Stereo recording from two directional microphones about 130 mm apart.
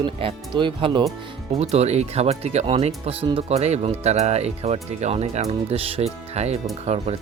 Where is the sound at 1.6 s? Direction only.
55° right (ahead or behind).